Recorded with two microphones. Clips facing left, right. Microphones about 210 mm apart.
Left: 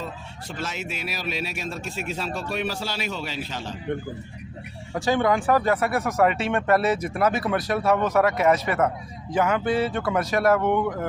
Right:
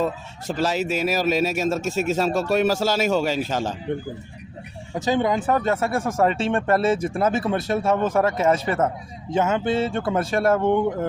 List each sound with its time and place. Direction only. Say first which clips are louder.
0.0 s speech: right 10 dB; 40° right (ahead or behind)
4.9 s speech: even; 20° right (ahead or behind)